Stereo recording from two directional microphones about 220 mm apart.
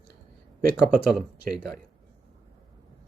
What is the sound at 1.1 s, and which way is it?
Speech, centre (ahead or behind).